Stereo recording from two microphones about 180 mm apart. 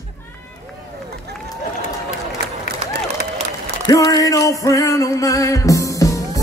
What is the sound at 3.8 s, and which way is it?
Music, 20° left (ahead or behind).